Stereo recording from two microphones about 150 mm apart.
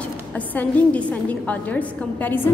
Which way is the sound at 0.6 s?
10° left (ahead or behind).